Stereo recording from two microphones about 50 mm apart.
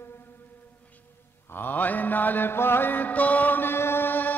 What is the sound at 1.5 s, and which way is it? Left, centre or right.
Mantra, left.